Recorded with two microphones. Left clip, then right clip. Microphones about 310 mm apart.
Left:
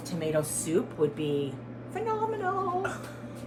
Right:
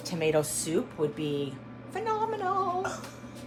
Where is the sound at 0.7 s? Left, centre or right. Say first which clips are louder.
Left 3 dB; centre.